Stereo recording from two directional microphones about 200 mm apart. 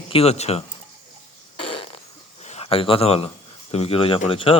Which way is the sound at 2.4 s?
30° left (ahead or behind).